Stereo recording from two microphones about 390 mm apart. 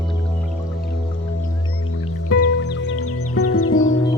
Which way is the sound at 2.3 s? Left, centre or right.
Left.